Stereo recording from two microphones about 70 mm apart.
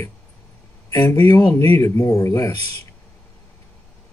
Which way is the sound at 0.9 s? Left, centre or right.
Left.